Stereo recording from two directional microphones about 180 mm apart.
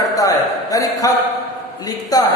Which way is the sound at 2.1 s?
20° left (ahead or behind).